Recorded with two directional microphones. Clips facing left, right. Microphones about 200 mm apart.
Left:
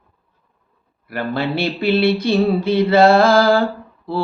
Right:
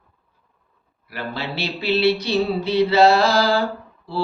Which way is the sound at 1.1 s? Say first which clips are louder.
Left 8 dB; 50° left (ahead or behind).